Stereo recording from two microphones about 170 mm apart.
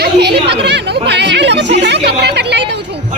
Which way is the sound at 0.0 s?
80° right.